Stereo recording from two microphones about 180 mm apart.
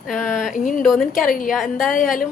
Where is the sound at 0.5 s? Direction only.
45° left (ahead or behind).